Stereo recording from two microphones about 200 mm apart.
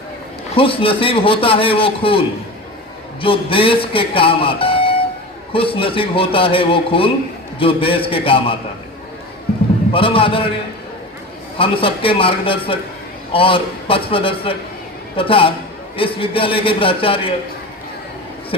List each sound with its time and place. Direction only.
0.5 s a man's voice: 25° left (ahead or behind)
9.9 s a man's voice: 25° left (ahead or behind)
11.5 s a man's voice: 25° left (ahead or behind)